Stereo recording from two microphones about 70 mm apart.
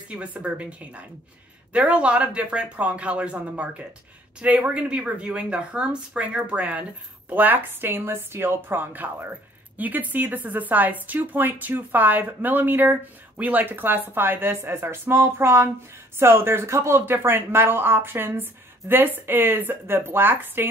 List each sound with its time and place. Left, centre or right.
0.1 s a woman's voice: centre